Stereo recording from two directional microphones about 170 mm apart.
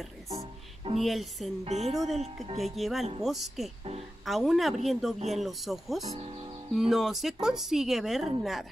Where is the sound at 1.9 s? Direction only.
Centre (ahead or behind).